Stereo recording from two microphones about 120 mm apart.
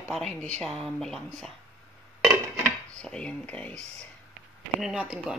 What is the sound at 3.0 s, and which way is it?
Dishes, 10° left (ahead or behind).